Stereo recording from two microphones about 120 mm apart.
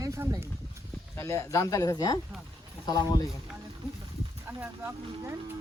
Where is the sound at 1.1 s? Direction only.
25° left (ahead or behind).